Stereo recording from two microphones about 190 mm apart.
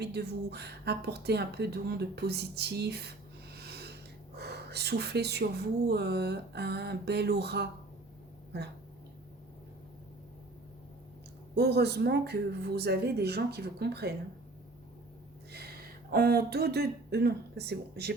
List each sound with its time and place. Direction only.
0.0 s speech: 60° right (ahead or behind)
11.5 s speech: 60° right (ahead or behind)
15.5 s speech: 55° right (ahead or behind)